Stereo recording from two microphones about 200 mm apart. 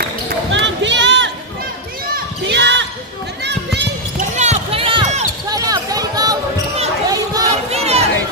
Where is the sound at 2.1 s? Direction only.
60° right (ahead or behind).